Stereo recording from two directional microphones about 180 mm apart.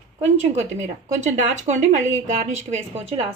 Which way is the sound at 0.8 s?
40° right (ahead or behind).